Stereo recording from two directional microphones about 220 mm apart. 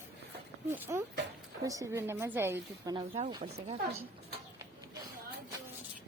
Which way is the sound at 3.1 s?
25° right (ahead or behind).